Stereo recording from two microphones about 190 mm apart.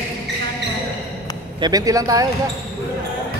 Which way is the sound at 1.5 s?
20° right (ahead or behind).